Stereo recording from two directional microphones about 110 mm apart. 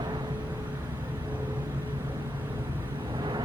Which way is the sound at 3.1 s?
40° right (ahead or behind).